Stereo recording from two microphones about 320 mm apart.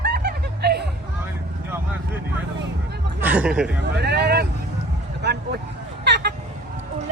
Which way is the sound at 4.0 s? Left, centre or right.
Right.